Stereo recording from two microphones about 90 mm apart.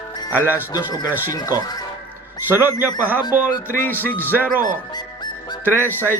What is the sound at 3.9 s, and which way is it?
Speech, 20° left (ahead or behind).